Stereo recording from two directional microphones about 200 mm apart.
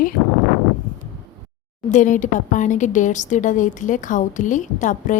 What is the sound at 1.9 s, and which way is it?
A woman's voice, 40° left (ahead or behind).